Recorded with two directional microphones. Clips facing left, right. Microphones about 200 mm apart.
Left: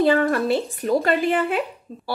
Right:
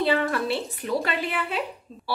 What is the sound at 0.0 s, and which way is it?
A woman's voice, 45° left (ahead or behind).